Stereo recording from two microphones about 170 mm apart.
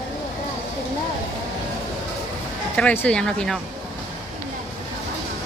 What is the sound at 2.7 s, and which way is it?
Speech, 10° left (ahead or behind).